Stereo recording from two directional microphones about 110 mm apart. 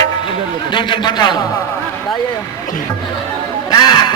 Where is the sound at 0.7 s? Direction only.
45° left (ahead or behind).